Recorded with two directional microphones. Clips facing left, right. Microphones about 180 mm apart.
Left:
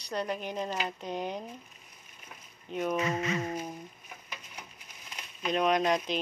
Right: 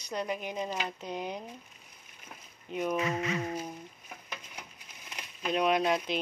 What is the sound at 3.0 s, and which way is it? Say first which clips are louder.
Speech: left 1 dB; 35° left (ahead or behind).